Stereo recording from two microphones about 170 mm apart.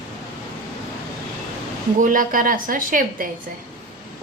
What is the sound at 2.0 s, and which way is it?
A woman's voice, 50° right (ahead or behind).